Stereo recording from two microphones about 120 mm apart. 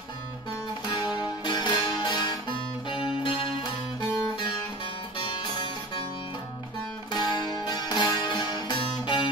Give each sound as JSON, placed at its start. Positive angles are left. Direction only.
{"t": 0.8, "sound": "music", "side_deg": 40}
{"t": 5.2, "sound": "music", "side_deg": 45}
{"t": 7.1, "sound": "music", "side_deg": 40}